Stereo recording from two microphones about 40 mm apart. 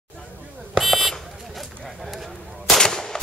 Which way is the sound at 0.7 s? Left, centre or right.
Centre.